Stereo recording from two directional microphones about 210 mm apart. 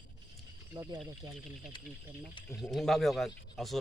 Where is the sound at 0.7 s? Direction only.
20° right (ahead or behind).